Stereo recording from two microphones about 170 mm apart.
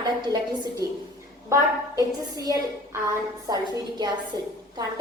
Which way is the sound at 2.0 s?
20° right (ahead or behind).